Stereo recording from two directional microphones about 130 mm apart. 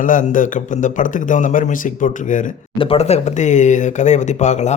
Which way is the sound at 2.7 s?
45° left (ahead or behind).